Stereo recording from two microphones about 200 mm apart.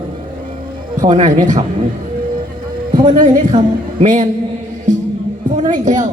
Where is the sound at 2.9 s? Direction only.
35° right (ahead or behind).